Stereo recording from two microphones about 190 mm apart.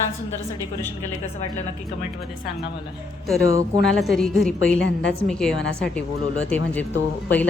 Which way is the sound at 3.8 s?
Centre (ahead or behind).